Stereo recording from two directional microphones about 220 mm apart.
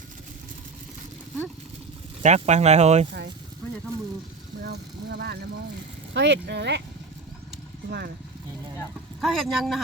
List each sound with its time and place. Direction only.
2.2 s speech: 30° right (ahead or behind)
4.6 s speech: 45° right (ahead or behind)
7.9 s speech: 45° right (ahead or behind)
9.2 s speech: centre (ahead or behind)